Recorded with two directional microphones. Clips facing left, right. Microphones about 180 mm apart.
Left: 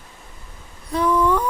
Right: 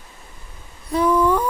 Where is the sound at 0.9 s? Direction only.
10° right (ahead or behind).